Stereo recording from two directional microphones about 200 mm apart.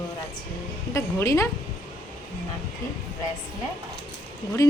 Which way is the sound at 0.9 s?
15° left (ahead or behind).